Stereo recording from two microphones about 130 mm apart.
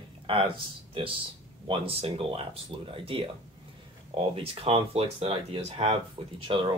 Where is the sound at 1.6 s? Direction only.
45° right (ahead or behind).